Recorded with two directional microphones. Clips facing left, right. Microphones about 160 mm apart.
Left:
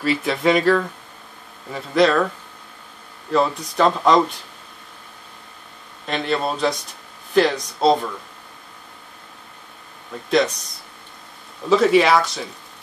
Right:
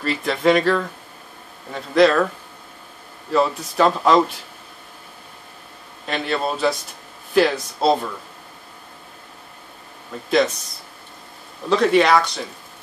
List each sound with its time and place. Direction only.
0.0 s speech: centre (ahead or behind)
3.3 s speech: centre (ahead or behind)
6.0 s speech: centre (ahead or behind)
10.3 s speech: centre (ahead or behind)
11.7 s speech: centre (ahead or behind)